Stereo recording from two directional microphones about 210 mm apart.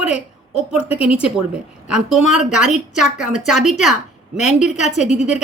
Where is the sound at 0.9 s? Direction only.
5° right (ahead or behind).